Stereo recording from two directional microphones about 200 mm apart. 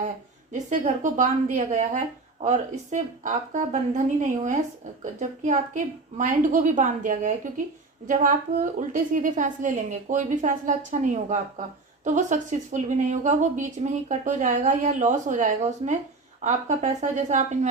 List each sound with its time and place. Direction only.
0.5 s speech: 40° right (ahead or behind)